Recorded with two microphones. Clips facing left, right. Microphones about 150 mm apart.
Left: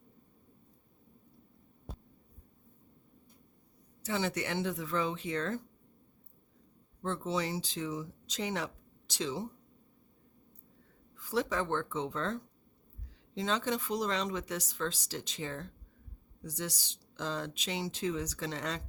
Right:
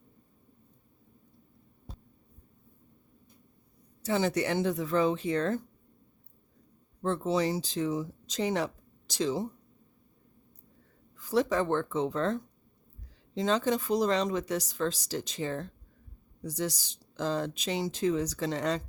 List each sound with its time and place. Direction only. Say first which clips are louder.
4.0 s speech: right 6 dB; 40° right (ahead or behind)
7.0 s speech: right 6 dB; 40° right (ahead or behind)
11.2 s speech: right 6 dB; 40° right (ahead or behind)